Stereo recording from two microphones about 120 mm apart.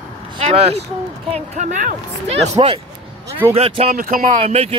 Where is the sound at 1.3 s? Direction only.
80° right; by 4.7 s 60° right (ahead or behind).